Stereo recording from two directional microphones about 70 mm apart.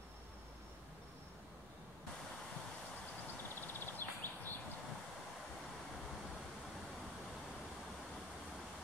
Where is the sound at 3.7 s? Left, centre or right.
Left.